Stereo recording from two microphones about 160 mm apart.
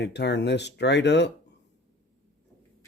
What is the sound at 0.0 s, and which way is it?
Speech, 90° left.